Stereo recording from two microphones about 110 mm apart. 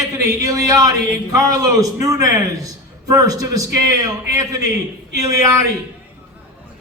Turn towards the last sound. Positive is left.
turn(degrees=-30)  # may be behind; listen again after turning